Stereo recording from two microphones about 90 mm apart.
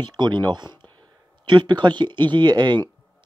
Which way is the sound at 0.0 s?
55° right (ahead or behind).